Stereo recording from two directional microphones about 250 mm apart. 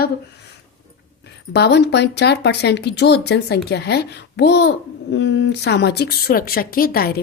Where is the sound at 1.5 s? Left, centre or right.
Left.